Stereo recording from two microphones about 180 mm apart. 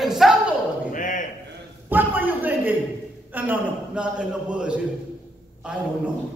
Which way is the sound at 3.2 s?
10° right (ahead or behind).